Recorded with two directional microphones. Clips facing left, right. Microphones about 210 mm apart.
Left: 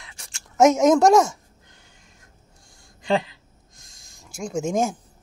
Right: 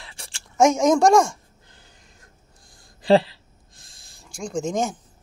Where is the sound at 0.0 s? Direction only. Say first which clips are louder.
Right 4 dB; 30° right (ahead or behind).